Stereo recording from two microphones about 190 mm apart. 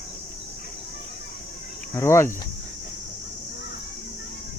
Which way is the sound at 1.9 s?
15° left (ahead or behind).